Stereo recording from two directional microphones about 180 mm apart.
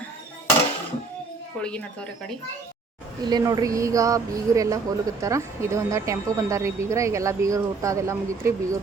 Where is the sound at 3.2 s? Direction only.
25° right (ahead or behind).